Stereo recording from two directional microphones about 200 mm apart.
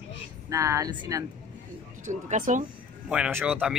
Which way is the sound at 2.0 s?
40° right (ahead or behind).